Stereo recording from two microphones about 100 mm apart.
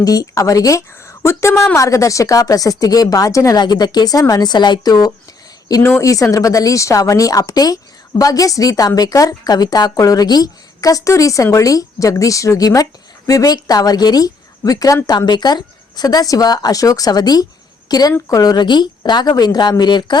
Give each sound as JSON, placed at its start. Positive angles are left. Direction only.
{"t": 0.0, "sound": "a woman's voice", "side_deg": 40}
{"t": 3.6, "sound": "speech", "side_deg": 45}
{"t": 5.8, "sound": "a woman's voice", "side_deg": 30}